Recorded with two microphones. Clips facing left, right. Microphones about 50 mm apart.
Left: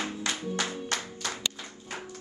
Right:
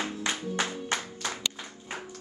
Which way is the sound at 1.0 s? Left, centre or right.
Centre.